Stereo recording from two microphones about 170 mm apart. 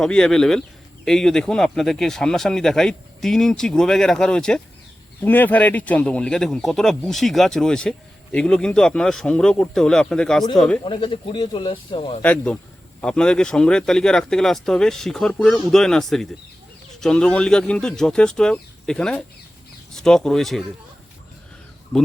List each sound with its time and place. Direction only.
0.0 s speech: 5° left (ahead or behind)
10.8 s a man's voice: 30° left (ahead or behind)
12.2 s speech: 10° left (ahead or behind)